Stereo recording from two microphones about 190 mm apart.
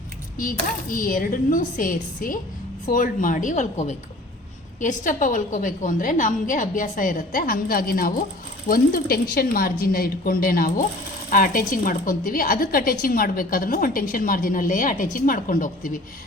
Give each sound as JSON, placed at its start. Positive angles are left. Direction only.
{"t": 0.3, "sound": "speech", "side_deg": 45}